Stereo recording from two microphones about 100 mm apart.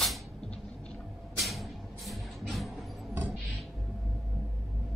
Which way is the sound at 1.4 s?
Centre (ahead or behind).